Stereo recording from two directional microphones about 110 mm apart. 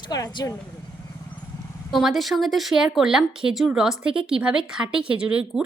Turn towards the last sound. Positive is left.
turn(degrees=-10)  # may be behind; listen again after turning